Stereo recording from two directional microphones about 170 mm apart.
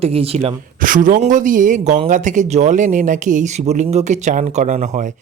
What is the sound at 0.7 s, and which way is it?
Speech, 50° right (ahead or behind).